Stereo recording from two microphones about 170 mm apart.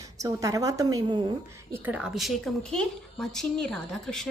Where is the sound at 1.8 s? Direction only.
5° right (ahead or behind).